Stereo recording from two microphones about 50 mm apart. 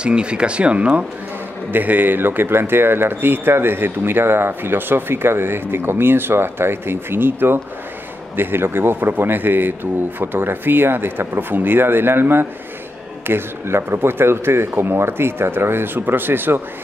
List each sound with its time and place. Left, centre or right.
0.0 s speech: right
1.7 s a man's voice: right